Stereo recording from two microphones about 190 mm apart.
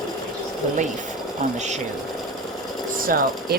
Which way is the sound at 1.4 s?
40° right (ahead or behind).